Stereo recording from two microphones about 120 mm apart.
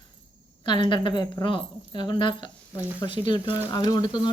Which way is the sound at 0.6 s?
40° left (ahead or behind).